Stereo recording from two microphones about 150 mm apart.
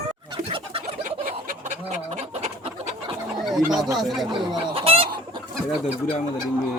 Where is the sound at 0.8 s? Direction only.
65° right (ahead or behind).